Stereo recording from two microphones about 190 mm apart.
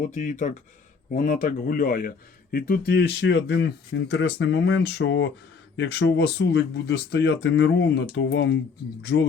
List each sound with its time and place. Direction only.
0.0 s speech: 40° left (ahead or behind); by 9.2 s 65° left (ahead or behind)